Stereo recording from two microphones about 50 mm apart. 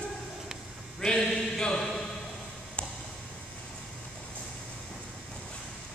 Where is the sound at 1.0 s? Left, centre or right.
Centre.